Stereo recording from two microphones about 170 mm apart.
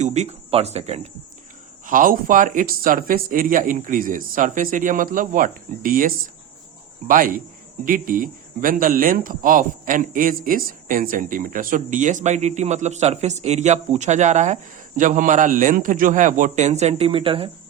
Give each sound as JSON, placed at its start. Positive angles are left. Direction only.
{"t": 0.0, "sound": "speech", "side_deg": -40}
{"t": 1.9, "sound": "speech", "side_deg": -50}